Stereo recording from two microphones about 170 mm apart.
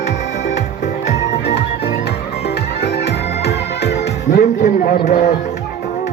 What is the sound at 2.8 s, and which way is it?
Music, 75° left (ahead or behind).